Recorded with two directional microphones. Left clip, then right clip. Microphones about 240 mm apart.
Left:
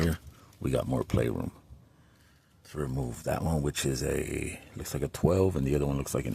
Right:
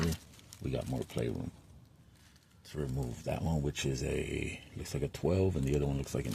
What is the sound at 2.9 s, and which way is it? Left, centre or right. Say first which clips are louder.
Speech: left 7 dB; left.